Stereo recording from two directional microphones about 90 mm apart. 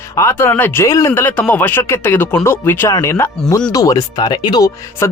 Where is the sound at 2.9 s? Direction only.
35° left (ahead or behind).